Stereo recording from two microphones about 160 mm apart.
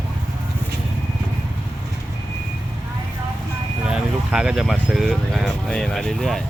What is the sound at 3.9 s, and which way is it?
Speech, 5° right (ahead or behind).